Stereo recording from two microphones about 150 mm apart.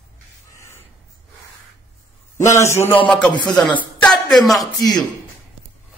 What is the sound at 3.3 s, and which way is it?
Speech, 30° left (ahead or behind).